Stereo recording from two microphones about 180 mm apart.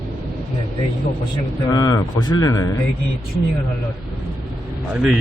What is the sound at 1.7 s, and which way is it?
A man's voice, 20° left (ahead or behind).